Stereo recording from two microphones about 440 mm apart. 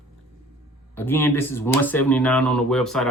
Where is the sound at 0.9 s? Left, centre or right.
Centre.